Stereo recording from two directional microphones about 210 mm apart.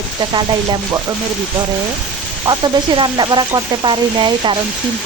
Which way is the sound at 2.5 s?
20° right (ahead or behind).